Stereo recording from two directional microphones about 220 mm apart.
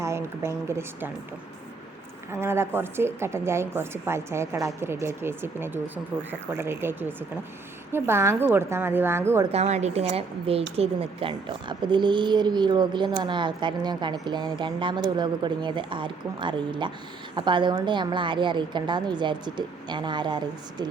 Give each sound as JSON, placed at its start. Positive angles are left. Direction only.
{"t": 0.0, "sound": "a woman's voice", "side_deg": -10}
{"t": 2.3, "sound": "speech", "side_deg": -10}
{"t": 9.5, "sound": "speech", "side_deg": -30}